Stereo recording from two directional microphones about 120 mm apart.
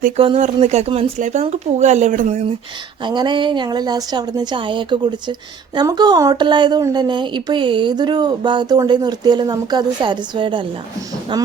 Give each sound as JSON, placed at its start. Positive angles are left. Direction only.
{"t": 0.3, "sound": "speech", "side_deg": -70}
{"t": 3.0, "sound": "speech", "side_deg": -40}